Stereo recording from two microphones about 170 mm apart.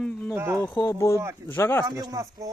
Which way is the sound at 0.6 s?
10° left (ahead or behind).